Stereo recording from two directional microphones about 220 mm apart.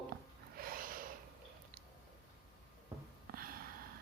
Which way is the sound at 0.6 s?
40° right (ahead or behind).